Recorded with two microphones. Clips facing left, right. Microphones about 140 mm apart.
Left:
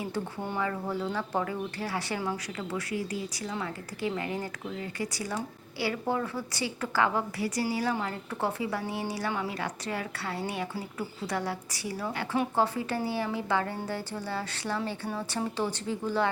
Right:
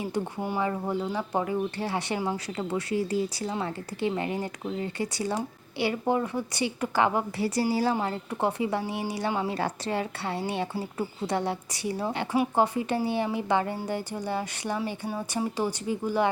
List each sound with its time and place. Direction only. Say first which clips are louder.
0.4 s speech: right 3 dB; 15° right (ahead or behind)
7.4 s speech: right 5 dB; 30° right (ahead or behind)
7.9 s speech: right 4 dB; 20° right (ahead or behind)